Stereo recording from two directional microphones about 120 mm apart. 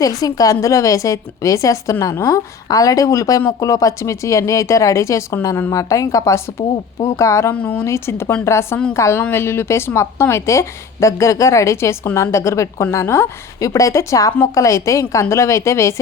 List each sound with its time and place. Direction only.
0.0 s a woman's voice: 30° left (ahead or behind)
7.5 s a woman's voice: 15° left (ahead or behind)